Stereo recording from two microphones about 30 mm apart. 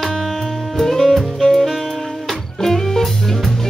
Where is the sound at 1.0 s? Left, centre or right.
Centre.